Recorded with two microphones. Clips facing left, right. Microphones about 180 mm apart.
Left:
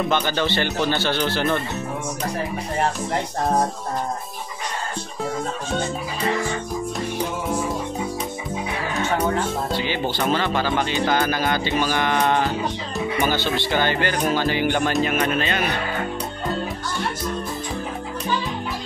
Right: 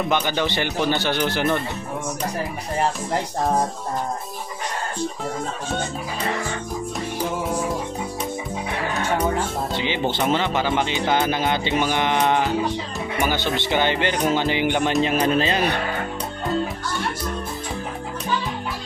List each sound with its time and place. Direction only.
0.1 s speech: 15° right (ahead or behind)
9.8 s speech: 20° right (ahead or behind)
15.0 s speech: 30° right (ahead or behind)